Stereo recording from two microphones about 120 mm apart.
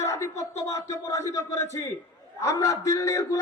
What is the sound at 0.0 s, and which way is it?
A man's voice, 25° left (ahead or behind).